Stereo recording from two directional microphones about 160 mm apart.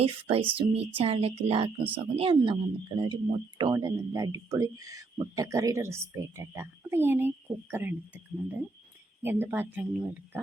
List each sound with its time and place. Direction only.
0.0 s speech: 35° right (ahead or behind); by 9.8 s 15° right (ahead or behind)